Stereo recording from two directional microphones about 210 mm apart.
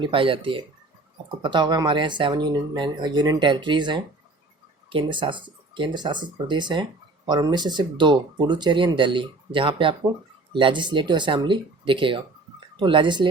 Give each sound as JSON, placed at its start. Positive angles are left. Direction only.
{"t": 0.0, "sound": "speech", "side_deg": -25}